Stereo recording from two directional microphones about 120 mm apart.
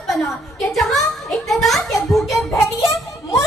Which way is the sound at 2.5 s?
25° left (ahead or behind).